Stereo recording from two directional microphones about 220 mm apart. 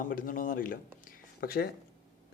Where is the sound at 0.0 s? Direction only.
40° left (ahead or behind).